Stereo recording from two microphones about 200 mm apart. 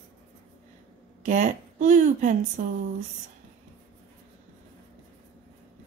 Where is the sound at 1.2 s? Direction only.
40° right (ahead or behind).